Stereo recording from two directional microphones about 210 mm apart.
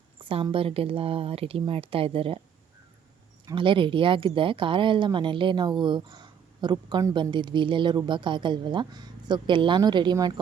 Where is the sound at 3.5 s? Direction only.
25° right (ahead or behind).